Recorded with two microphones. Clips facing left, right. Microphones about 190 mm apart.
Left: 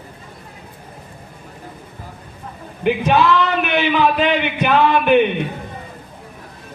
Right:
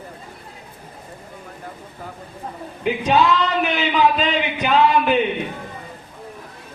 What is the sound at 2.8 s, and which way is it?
Speech, 65° left (ahead or behind).